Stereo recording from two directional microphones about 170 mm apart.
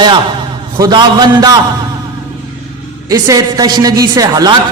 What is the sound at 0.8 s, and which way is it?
Speech, 25° right (ahead or behind).